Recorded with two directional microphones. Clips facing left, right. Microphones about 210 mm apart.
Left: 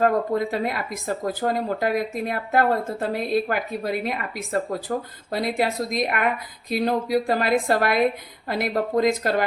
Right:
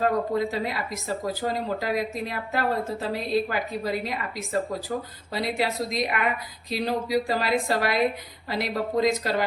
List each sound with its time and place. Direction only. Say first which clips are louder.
0.0 s speech: left 3 dB; 55° left (ahead or behind)